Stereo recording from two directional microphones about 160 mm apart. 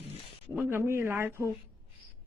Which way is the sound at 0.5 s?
15° right (ahead or behind).